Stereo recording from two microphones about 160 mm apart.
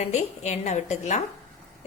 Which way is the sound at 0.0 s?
45° left (ahead or behind).